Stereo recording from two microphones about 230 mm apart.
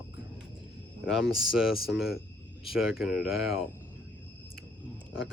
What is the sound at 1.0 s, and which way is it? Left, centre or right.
Speech, centre.